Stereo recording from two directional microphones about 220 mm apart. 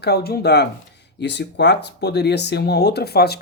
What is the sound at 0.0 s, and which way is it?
Speech, 45° left (ahead or behind).